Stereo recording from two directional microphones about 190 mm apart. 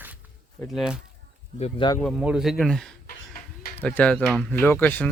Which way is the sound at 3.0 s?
50° left (ahead or behind).